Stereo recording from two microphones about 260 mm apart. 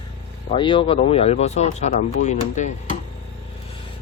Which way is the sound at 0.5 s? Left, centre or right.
Centre.